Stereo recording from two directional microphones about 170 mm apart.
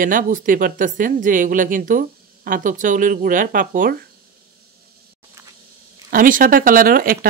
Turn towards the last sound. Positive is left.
turn(degrees=-55)  # may be behind; listen again after turning